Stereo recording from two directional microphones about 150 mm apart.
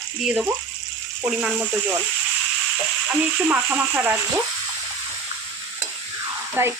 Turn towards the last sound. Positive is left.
turn(degrees=-15)  # may be behind; listen again after turning